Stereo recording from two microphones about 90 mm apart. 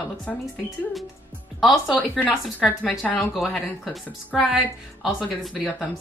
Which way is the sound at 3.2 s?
Centre (ahead or behind).